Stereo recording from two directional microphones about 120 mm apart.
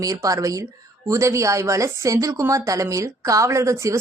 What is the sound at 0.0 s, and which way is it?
A woman's voice, 30° right (ahead or behind).